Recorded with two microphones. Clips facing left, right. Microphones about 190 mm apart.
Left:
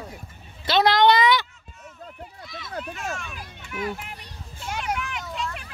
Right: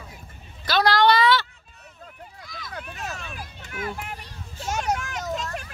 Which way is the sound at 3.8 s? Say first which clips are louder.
Left 1 dB; 50° right (ahead or behind).